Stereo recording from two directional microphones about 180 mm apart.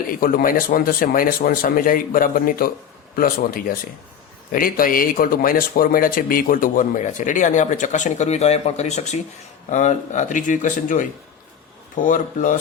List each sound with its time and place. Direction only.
0.1 s speech: 55° left (ahead or behind)